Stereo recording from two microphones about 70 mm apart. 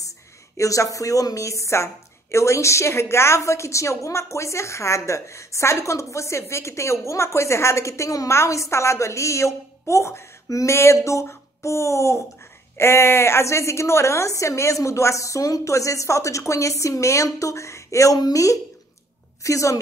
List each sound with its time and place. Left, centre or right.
0.6 s a woman's voice: left